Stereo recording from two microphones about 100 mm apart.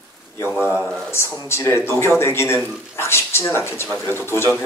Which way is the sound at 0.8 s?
5° left (ahead or behind).